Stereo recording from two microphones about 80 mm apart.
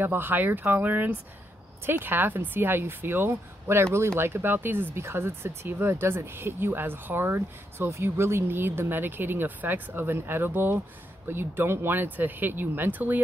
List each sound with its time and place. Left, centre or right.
0.0 s speech: right